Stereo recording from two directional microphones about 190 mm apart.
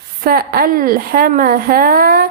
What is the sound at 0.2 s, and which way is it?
Speech, 50° right (ahead or behind).